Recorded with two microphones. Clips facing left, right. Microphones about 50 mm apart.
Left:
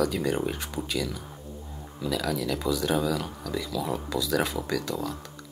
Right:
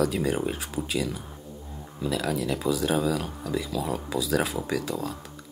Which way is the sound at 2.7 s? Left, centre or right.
Centre.